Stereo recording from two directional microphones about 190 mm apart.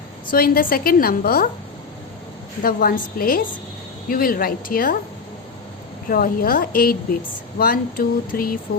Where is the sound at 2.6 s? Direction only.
50° left (ahead or behind).